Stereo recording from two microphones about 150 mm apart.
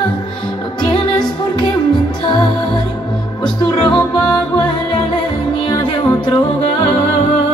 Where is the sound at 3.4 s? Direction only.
30° left (ahead or behind).